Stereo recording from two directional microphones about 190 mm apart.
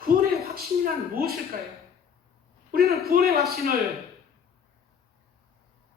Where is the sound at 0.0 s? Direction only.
50° right (ahead or behind).